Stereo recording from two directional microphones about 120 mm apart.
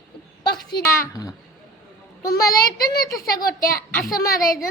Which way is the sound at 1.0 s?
30° left (ahead or behind).